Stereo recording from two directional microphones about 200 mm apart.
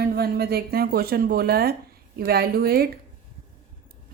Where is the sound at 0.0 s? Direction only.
50° right (ahead or behind).